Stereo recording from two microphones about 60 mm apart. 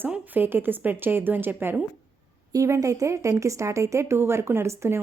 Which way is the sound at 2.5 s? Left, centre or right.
Right.